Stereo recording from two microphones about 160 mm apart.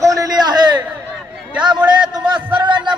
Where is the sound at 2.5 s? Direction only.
30° right (ahead or behind).